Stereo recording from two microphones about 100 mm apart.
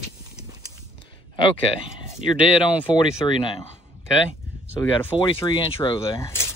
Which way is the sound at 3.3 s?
60° left (ahead or behind).